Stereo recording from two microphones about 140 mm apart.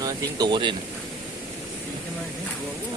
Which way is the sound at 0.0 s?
30° right (ahead or behind).